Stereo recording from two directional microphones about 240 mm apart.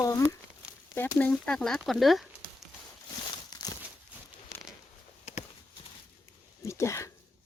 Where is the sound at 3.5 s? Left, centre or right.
Centre.